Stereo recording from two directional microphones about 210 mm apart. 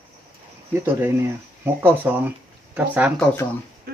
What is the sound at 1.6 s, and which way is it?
Speech, 10° right (ahead or behind).